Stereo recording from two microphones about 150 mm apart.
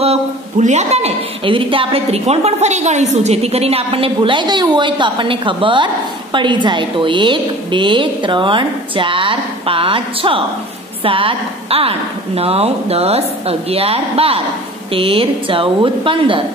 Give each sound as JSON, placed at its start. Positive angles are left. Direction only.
{"t": 0.0, "sound": "a woman's voice", "side_deg": -45}